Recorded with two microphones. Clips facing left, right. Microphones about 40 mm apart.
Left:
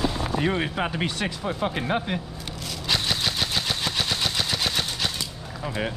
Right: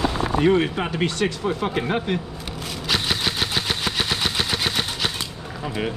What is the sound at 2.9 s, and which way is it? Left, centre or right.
Vehicle, right.